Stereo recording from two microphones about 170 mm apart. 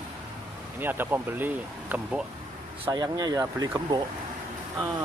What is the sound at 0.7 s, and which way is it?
Speech, 10° right (ahead or behind).